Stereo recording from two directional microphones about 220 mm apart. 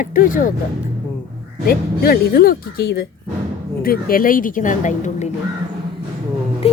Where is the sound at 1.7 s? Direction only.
45° left (ahead or behind).